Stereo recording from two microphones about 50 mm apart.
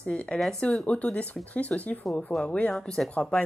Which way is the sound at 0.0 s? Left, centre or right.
Left.